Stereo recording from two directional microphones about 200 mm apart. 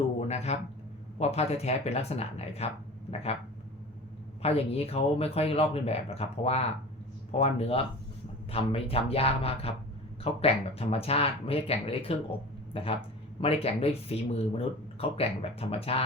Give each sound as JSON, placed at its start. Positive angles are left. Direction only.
{"t": 0.3, "sound": "a sound", "side_deg": 35}
{"t": 1.2, "sound": "speech", "side_deg": 30}
{"t": 4.4, "sound": "speech", "side_deg": 30}